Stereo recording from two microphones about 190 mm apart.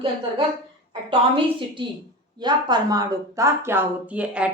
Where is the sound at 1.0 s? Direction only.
25° right (ahead or behind); by 4.5 s 5° right (ahead or behind).